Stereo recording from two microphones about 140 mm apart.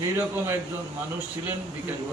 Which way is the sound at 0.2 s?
20° right (ahead or behind).